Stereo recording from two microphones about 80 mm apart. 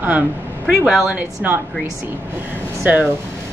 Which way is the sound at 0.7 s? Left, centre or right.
Centre.